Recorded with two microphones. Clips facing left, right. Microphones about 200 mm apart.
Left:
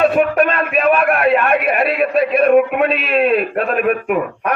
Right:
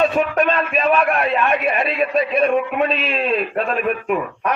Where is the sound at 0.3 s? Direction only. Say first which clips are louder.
Left 2 dB; 5° left (ahead or behind).